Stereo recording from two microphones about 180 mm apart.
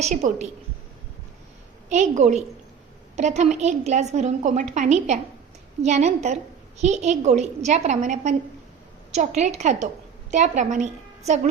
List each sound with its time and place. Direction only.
0.0 s a woman's voice: 40° right (ahead or behind)
1.9 s a woman's voice: 40° right (ahead or behind)